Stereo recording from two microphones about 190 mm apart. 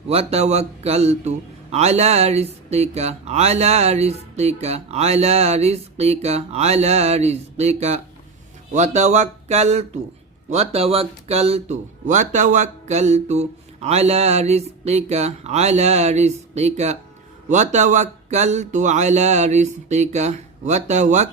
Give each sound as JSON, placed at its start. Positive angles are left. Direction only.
{"t": 0.1, "sound": "speech", "side_deg": -30}